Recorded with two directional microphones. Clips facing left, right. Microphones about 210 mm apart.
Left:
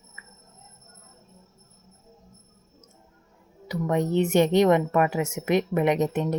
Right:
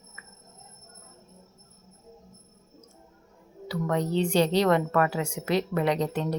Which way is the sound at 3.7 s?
20° left (ahead or behind).